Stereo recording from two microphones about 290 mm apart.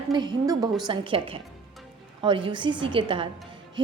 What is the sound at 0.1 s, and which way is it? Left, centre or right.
A woman's voice, centre.